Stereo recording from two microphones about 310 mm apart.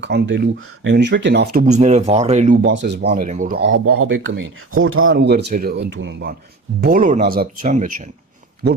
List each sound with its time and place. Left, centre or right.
0.0 s speech: right
2.6 s speech: right